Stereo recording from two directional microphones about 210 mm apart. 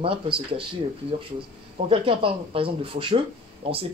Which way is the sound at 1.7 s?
25° right (ahead or behind).